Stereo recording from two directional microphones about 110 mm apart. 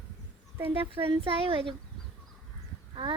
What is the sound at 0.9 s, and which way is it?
Speech, 55° right (ahead or behind).